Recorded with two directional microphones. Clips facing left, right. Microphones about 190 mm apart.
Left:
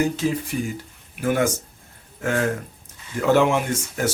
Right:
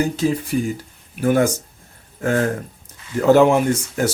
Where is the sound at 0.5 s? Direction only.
35° right (ahead or behind).